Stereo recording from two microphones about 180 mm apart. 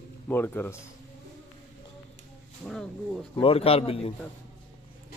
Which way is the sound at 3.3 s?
30° left (ahead or behind).